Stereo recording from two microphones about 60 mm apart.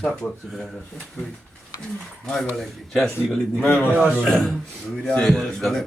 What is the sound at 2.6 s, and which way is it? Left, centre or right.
Speech, centre.